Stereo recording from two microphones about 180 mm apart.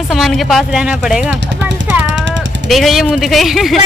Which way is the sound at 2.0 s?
90° right.